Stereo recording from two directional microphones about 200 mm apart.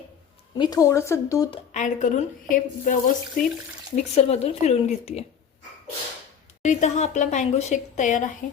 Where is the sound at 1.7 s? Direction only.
40° left (ahead or behind).